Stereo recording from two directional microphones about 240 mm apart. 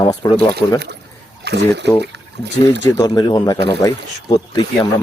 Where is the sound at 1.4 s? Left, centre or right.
Right.